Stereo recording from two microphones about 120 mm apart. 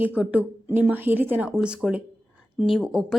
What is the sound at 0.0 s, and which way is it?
A woman's voice, 10° right (ahead or behind).